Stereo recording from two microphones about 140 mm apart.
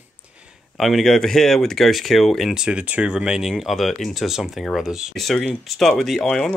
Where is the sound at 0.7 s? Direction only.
Centre (ahead or behind).